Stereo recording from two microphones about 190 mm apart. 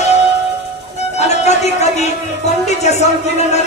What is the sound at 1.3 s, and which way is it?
Music, 35° left (ahead or behind).